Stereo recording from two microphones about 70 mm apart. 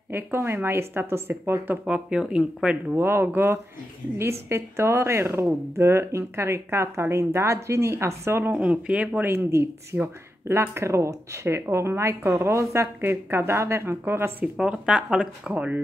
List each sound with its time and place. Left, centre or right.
0.1 s a woman's voice: right
1.9 s speech: centre
2.9 s a woman's voice: right
8.5 s speech: centre
9.2 s a woman's voice: right
14.4 s speech: centre